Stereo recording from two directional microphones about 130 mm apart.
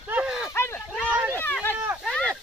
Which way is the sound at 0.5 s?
20° left (ahead or behind).